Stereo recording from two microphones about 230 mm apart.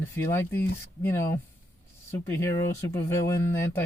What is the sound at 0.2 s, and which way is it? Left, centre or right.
Speech, centre.